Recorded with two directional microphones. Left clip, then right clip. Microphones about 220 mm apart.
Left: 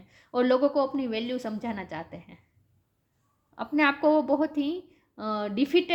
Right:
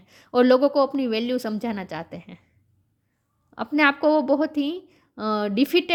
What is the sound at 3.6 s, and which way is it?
Speech, 50° right (ahead or behind).